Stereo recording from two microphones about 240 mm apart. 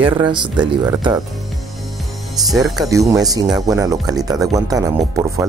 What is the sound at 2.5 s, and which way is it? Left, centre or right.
Speech, centre.